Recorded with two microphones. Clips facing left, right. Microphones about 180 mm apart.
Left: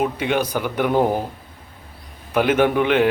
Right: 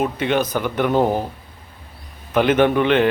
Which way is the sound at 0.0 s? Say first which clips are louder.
Right 1 dB; 10° left (ahead or behind).